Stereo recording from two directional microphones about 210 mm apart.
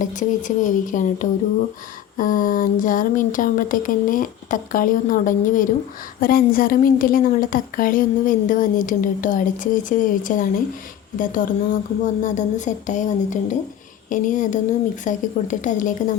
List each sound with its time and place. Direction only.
0.0 s a woman's voice: 35° left (ahead or behind)